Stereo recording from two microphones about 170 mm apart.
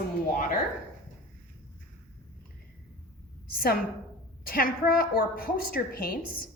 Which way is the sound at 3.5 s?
60° left (ahead or behind).